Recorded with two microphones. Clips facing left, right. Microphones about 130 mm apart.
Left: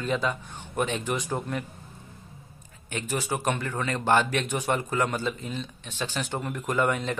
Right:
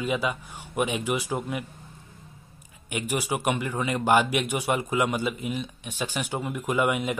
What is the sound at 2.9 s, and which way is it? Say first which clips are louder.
A man's voice: right 2 dB; 15° right (ahead or behind).